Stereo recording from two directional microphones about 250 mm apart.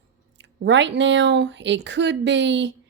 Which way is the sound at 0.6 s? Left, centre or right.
Right.